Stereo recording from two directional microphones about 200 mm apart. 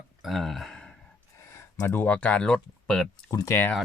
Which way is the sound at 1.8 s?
10° left (ahead or behind).